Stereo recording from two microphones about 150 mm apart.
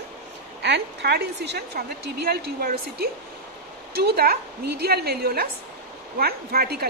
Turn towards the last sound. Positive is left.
turn(degrees=-90)